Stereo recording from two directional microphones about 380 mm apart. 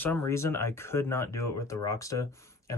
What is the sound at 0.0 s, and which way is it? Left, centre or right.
Speech, centre.